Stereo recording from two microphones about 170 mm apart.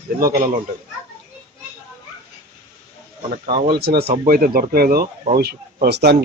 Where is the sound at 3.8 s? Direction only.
70° right (ahead or behind).